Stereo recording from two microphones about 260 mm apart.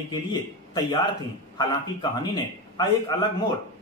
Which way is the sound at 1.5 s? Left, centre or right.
Centre.